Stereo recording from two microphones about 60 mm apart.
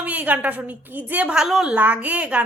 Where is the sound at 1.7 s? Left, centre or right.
Right.